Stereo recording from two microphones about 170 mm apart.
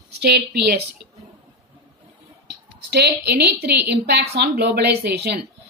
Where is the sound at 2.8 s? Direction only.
75° right (ahead or behind).